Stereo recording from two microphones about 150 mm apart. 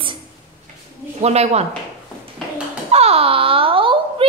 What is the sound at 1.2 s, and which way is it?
Speech, 45° right (ahead or behind).